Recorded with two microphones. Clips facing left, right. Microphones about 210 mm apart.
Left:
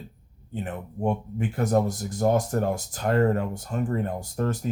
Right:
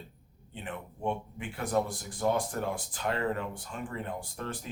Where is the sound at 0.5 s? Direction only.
45° left (ahead or behind).